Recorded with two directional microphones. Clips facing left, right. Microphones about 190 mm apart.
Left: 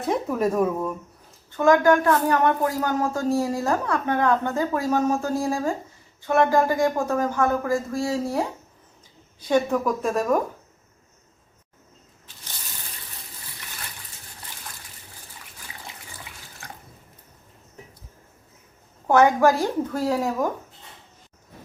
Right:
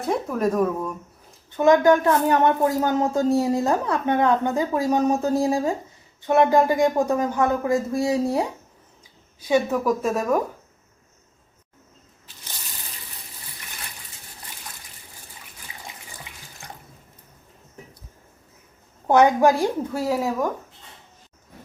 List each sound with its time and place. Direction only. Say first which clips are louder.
0.0 s speech: even; centre (ahead or behind)
1.5 s speech: right 1 dB; 20° right (ahead or behind)
9.5 s speech: right 1 dB; 5° right (ahead or behind)
19.0 s speech: right 1 dB; 15° right (ahead or behind)